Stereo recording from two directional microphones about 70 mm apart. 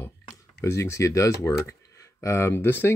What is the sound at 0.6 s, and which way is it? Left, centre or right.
Speech, left.